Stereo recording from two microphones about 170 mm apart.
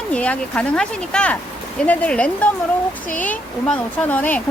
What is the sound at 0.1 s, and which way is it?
A woman's voice, 5° left (ahead or behind).